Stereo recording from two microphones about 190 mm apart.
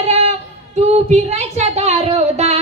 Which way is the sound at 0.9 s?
35° right (ahead or behind).